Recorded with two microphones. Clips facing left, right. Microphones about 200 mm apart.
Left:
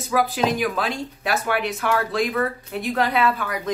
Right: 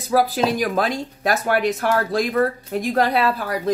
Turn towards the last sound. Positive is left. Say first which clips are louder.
# right 2 dB
turn(degrees=-35)  # may be behind; listen again after turning